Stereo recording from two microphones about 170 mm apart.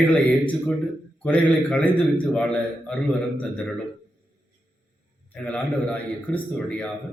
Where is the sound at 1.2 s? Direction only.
5° left (ahead or behind).